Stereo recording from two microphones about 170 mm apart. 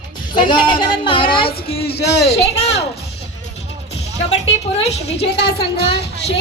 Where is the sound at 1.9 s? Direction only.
75° left (ahead or behind).